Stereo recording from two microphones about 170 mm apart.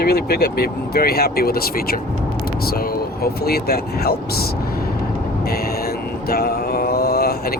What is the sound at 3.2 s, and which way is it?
Speech, 65° left (ahead or behind).